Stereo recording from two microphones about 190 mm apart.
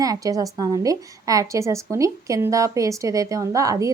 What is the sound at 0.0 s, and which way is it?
A woman's voice, 20° right (ahead or behind).